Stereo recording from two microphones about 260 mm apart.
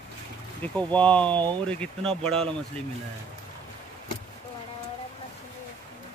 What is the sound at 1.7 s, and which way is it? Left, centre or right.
Speech, centre.